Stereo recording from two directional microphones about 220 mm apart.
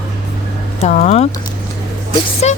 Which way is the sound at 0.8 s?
30° left (ahead or behind).